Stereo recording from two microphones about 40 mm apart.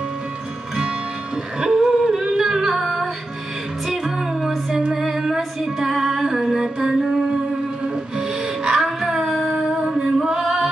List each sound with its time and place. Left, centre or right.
1.6 s humming: centre
3.8 s music: centre
4.9 s female singing: centre
8.2 s music: centre
8.8 s female singing: centre